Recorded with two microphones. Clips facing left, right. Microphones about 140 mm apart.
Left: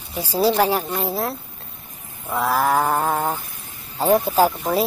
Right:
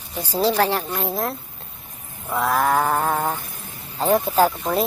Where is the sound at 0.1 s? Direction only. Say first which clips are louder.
Left 2 dB; 10° left (ahead or behind).